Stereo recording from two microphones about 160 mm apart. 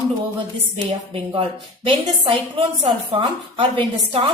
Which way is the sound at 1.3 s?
30° right (ahead or behind).